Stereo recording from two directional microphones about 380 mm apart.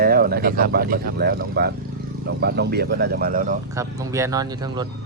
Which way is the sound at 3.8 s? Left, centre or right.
Centre.